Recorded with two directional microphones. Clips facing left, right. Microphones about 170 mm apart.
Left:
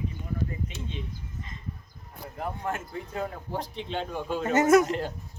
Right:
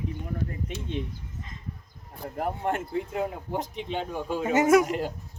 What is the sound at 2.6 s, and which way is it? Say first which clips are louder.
Speech: right 5 dB; 25° right (ahead or behind).